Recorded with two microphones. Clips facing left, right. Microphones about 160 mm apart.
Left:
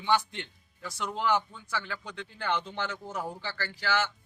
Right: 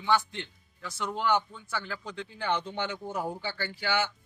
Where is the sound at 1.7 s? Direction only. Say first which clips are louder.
Even; 5° right (ahead or behind).